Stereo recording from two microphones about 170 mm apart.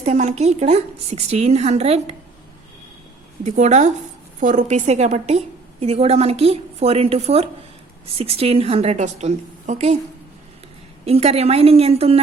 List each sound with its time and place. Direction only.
0.0 s a woman's voice: 45° right (ahead or behind)
3.4 s a woman's voice: 45° right (ahead or behind)
11.0 s a woman's voice: 35° right (ahead or behind)